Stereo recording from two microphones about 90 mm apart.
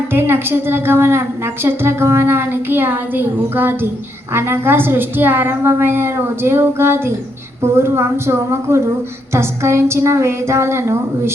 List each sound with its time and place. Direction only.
0.1 s a woman's voice: 25° right (ahead or behind)